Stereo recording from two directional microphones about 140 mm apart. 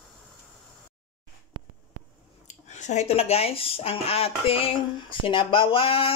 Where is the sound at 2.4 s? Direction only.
60° left (ahead or behind).